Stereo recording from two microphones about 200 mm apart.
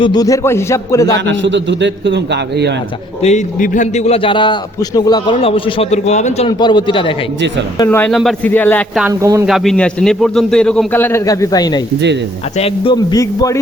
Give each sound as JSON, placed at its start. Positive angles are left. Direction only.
{"t": 0.0, "sound": "a man's voice", "side_deg": 20}
{"t": 1.1, "sound": "a man's voice", "side_deg": -65}
{"t": 3.2, "sound": "a man's voice", "side_deg": 40}
{"t": 6.5, "sound": "a man's voice", "side_deg": 20}
{"t": 7.8, "sound": "a man's voice", "side_deg": 10}
{"t": 9.0, "sound": "speech", "side_deg": -10}
{"t": 9.5, "sound": "a man's voice", "side_deg": 5}